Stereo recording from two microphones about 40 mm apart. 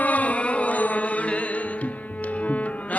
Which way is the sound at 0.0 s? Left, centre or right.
Left.